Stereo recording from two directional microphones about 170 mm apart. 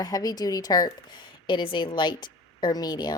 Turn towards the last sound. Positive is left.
turn(degrees=25)  # may be behind; listen again after turning